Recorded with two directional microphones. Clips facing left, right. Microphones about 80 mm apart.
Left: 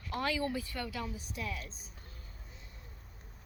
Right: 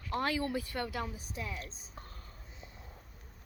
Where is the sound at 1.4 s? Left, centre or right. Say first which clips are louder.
Left 1 dB; right.